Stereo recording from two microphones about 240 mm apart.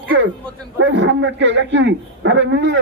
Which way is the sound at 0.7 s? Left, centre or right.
Right.